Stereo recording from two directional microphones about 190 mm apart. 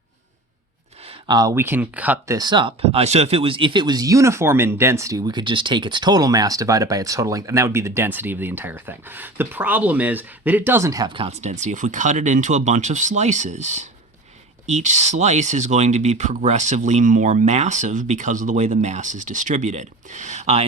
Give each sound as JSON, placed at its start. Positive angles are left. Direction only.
{"t": 1.0, "sound": "speech", "side_deg": -20}